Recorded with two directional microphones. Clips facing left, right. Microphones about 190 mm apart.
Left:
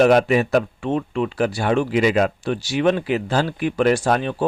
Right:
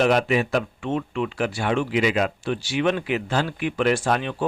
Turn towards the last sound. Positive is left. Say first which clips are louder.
# left 4 dB
turn(degrees=40)  # may be behind; listen again after turning